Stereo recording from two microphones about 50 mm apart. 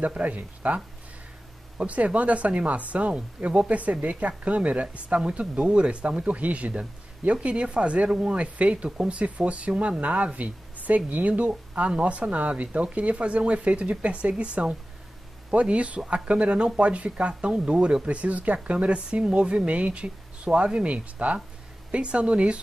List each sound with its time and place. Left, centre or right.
0.1 s speech: right
1.8 s speech: right